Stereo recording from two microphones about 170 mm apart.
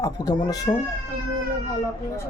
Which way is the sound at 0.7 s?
35° left (ahead or behind).